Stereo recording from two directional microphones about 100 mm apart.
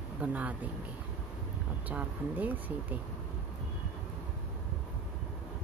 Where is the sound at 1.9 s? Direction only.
15° right (ahead or behind).